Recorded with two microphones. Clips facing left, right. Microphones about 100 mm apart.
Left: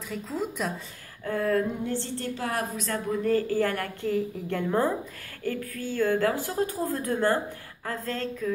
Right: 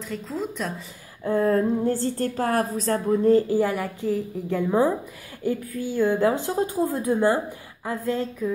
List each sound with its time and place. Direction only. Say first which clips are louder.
0.1 s speech: right 1 dB; centre (ahead or behind)
1.2 s a woman's voice: right 5 dB; 30° right (ahead or behind)